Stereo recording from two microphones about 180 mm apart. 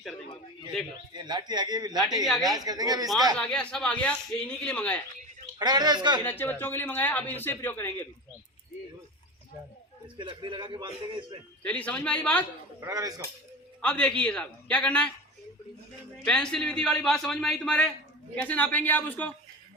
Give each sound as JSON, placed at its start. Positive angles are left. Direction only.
{"t": 1.1, "sound": "speech", "side_deg": -25}
{"t": 3.3, "sound": "a man's voice", "side_deg": 5}
{"t": 5.5, "sound": "speech", "side_deg": -20}
{"t": 6.2, "sound": "speech", "side_deg": 10}
{"t": 10.2, "sound": "speech", "side_deg": -25}
{"t": 11.6, "sound": "speech", "side_deg": 5}
{"t": 12.8, "sound": "speech", "side_deg": -20}
{"t": 13.8, "sound": "speech", "side_deg": 5}
{"t": 16.2, "sound": "a man's voice", "side_deg": 5}